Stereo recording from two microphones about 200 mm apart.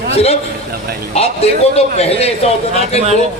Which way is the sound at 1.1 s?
30° left (ahead or behind).